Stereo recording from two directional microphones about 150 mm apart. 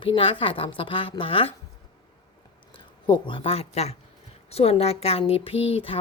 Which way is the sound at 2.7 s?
35° left (ahead or behind).